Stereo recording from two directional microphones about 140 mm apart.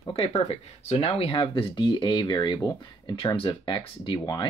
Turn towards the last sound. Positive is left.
turn(degrees=30)  # may be behind; listen again after turning